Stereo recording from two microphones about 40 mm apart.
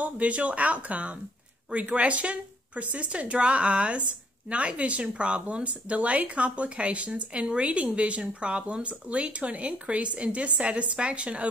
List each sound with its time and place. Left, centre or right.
0.0 s speech: right